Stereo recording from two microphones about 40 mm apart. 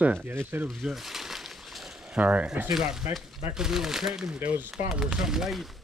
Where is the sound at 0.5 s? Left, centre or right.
Right.